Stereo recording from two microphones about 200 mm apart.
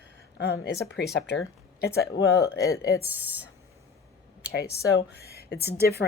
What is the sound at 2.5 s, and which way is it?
Speech, 15° left (ahead or behind).